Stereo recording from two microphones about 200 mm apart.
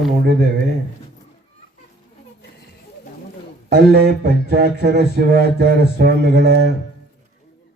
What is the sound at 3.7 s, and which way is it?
Speech, 55° right (ahead or behind).